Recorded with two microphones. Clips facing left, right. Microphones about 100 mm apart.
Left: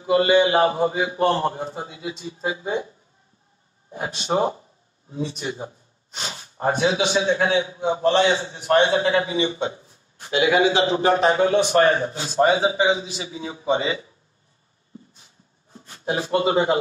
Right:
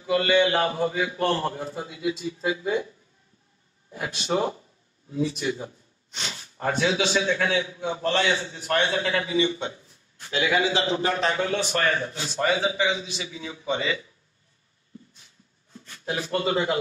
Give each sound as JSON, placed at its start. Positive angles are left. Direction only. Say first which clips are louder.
{"t": 0.0, "sound": "a man's voice", "louder": "left 4 dB", "side_deg": 30}
{"t": 10.9, "sound": "a man's voice", "louder": "left 6 dB", "side_deg": 30}
{"t": 15.7, "sound": "a man's voice", "louder": "left 5 dB", "side_deg": 30}